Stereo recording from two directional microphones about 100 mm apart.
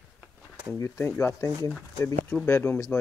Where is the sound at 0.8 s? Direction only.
30° left (ahead or behind).